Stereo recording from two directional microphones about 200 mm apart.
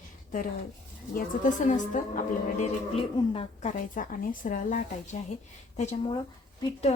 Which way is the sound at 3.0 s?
25° left (ahead or behind).